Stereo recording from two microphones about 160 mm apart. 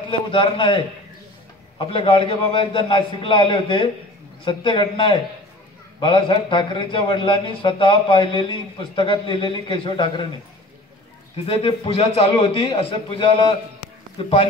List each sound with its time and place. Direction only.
0.1 s a man's voice: 35° left (ahead or behind)
1.8 s a man's voice: 35° left (ahead or behind)
11.4 s a man's voice: 35° left (ahead or behind)